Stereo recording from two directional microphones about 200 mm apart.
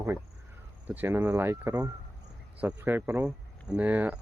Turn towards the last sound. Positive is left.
turn(degrees=-10)  # may be behind; listen again after turning